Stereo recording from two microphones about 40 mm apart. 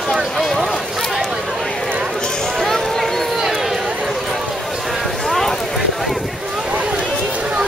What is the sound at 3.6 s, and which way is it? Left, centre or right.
Run, centre.